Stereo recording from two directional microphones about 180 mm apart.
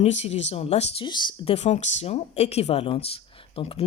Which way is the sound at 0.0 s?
40° left (ahead or behind).